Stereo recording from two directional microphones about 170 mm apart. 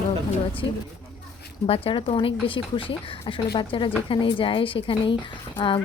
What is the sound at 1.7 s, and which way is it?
A woman's voice, 30° left (ahead or behind).